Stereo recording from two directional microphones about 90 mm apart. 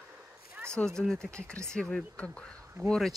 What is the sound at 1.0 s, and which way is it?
Speech, 10° left (ahead or behind).